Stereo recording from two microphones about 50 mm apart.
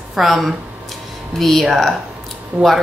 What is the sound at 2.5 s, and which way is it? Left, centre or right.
Speech, right.